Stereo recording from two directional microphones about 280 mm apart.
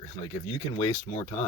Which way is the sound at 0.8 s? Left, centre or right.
Centre.